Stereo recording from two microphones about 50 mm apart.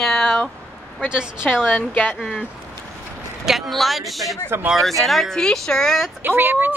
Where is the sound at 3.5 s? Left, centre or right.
Centre.